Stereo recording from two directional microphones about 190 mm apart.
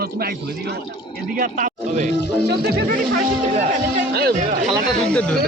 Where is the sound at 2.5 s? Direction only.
60° right (ahead or behind).